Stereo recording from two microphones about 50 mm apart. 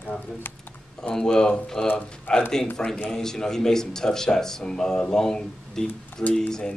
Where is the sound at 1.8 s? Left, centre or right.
Left.